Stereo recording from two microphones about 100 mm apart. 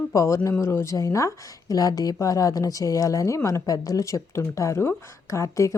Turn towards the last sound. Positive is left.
turn(degrees=30)  # may be behind; listen again after turning